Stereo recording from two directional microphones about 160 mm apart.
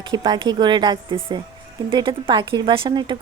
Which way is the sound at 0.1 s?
30° right (ahead or behind).